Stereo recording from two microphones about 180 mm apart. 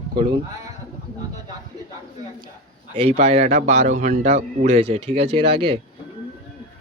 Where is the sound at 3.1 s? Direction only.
40° right (ahead or behind).